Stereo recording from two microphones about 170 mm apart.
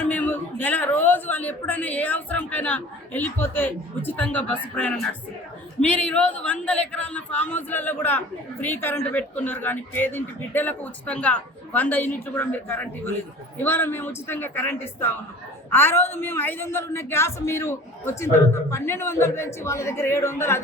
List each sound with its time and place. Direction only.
0.0 s a man's voice: 10° left (ahead or behind)